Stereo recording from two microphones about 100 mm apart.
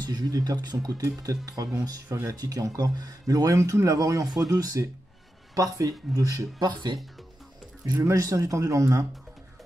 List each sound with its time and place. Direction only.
0.0 s speech: 40° right (ahead or behind)
8.0 s speech: 30° right (ahead or behind)